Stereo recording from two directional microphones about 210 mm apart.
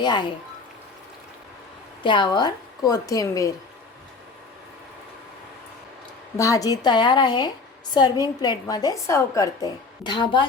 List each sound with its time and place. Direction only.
0.0 s speech: 20° left (ahead or behind)
2.0 s a woman's voice: 20° left (ahead or behind)
6.3 s a woman's voice: 15° left (ahead or behind)